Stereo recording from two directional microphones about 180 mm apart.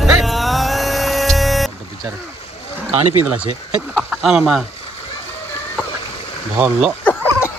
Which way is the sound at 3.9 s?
Centre (ahead or behind).